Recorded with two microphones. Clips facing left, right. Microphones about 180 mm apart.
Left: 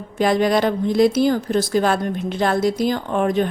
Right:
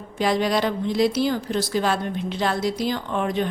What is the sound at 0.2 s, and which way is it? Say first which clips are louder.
Speech: left 4 dB; 50° left (ahead or behind).